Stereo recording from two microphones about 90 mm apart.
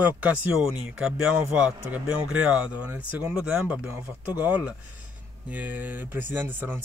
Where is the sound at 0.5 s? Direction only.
5° right (ahead or behind).